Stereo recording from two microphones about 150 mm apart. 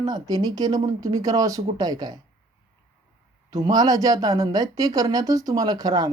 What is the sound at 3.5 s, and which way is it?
Speech, 25° right (ahead or behind).